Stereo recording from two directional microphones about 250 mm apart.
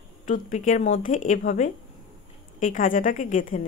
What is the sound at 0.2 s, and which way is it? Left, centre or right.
Speech, left.